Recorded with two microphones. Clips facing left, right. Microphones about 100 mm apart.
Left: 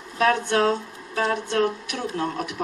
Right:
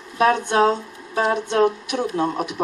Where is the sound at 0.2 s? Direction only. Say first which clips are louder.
Right 3 dB; 20° right (ahead or behind).